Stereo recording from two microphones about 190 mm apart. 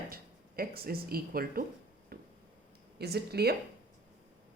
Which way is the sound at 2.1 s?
50° right (ahead or behind).